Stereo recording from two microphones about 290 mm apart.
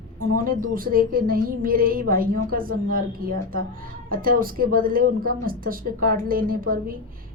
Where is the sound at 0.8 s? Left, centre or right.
Right.